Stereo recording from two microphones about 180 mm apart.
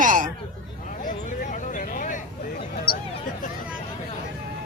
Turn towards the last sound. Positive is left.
turn(degrees=55)  # may be behind; listen again after turning